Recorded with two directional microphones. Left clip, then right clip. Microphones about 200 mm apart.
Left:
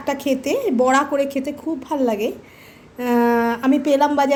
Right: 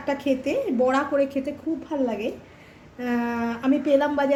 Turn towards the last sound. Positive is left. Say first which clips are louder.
# left 4 dB
turn(degrees=45)  # may be behind; listen again after turning